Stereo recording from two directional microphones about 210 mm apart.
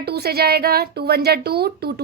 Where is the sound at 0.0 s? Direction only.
50° right (ahead or behind).